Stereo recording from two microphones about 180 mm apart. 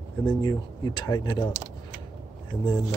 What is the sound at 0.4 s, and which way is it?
Speech, 20° left (ahead or behind).